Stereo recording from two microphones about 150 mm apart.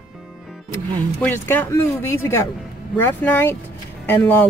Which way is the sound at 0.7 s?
15° left (ahead or behind).